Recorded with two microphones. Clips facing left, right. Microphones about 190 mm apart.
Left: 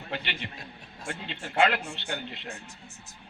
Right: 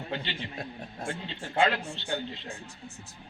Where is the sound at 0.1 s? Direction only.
65° left (ahead or behind).